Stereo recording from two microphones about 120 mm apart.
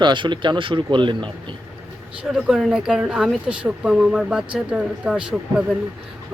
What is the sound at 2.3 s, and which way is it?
Speech, 5° right (ahead or behind).